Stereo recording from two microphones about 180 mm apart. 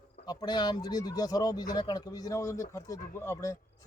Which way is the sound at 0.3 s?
25° left (ahead or behind).